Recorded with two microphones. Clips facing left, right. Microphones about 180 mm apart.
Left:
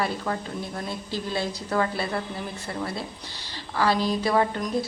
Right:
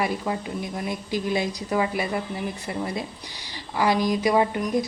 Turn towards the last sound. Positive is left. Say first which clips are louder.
# right 2 dB
turn(degrees=-15)  # may be behind; listen again after turning